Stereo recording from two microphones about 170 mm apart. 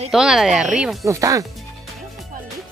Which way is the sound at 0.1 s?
5° right (ahead or behind).